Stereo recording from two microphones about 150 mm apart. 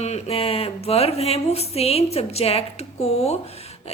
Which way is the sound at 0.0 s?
45° left (ahead or behind).